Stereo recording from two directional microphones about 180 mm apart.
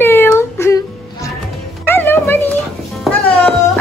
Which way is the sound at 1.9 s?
10° left (ahead or behind).